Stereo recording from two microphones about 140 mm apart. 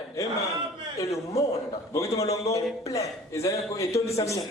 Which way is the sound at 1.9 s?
25° left (ahead or behind).